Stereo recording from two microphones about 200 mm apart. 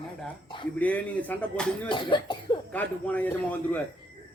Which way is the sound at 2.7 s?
10° left (ahead or behind).